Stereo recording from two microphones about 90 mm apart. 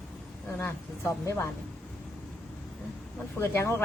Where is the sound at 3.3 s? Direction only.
25° left (ahead or behind).